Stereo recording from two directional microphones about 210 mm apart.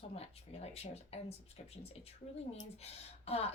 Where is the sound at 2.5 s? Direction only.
30° left (ahead or behind).